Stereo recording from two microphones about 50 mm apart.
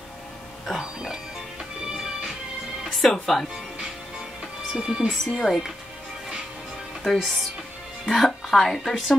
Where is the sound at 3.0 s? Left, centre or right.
Centre.